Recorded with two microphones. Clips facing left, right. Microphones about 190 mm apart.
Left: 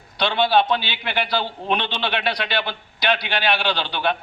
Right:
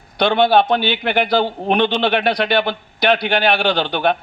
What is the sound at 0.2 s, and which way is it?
A man's voice, 50° right (ahead or behind).